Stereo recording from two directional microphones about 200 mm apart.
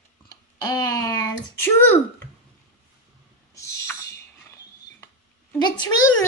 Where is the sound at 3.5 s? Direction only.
15° left (ahead or behind).